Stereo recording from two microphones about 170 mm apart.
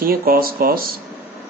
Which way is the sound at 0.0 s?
60° right (ahead or behind).